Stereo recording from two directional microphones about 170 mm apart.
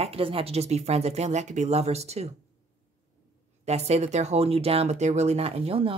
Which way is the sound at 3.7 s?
40° right (ahead or behind).